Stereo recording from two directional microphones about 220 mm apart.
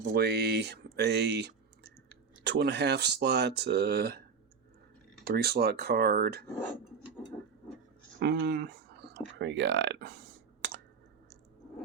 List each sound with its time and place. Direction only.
0.0 s speech: 50° right (ahead or behind)
5.2 s speech: 45° right (ahead or behind)
8.2 s speech: 45° right (ahead or behind)